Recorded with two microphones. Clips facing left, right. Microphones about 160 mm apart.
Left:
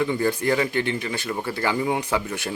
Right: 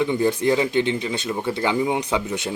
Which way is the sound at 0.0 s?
20° right (ahead or behind).